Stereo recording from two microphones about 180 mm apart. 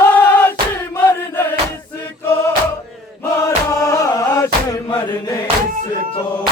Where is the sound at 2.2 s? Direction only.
10° left (ahead or behind).